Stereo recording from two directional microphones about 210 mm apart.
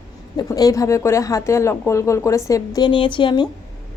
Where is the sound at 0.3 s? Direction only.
15° left (ahead or behind).